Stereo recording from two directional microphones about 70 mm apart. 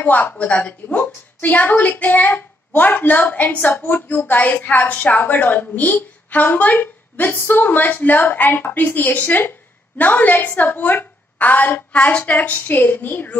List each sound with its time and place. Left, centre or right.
0.0 s a woman's voice: left